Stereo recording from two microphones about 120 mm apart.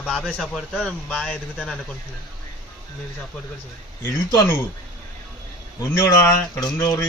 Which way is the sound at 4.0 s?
25° left (ahead or behind).